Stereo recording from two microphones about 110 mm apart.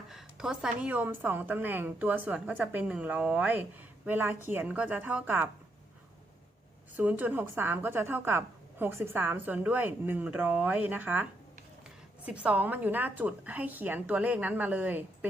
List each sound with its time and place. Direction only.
0.1 s a woman's voice: 5° right (ahead or behind)
6.9 s a woman's voice: 15° right (ahead or behind)